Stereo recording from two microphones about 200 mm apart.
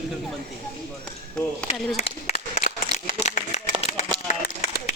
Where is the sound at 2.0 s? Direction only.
35° left (ahead or behind).